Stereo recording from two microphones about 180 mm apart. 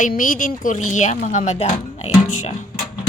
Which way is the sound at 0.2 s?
45° left (ahead or behind).